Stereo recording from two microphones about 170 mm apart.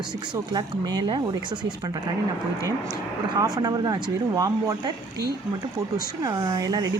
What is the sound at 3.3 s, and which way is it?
Dishes, 20° right (ahead or behind).